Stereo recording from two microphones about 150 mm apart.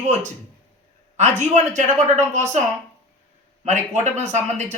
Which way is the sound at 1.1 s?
50° right (ahead or behind).